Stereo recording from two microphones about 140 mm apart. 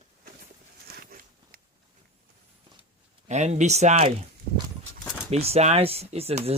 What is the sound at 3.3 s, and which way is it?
Speech, 55° right (ahead or behind).